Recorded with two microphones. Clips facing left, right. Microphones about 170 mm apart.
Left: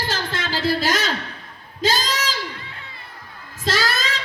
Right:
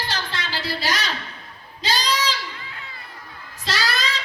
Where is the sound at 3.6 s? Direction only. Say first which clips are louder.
Left 3 dB; 50° left (ahead or behind).